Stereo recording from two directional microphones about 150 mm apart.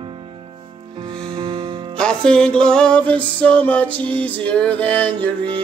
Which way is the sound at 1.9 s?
5° left (ahead or behind).